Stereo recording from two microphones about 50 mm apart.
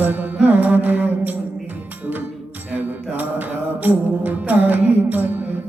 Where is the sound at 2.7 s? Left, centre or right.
Right.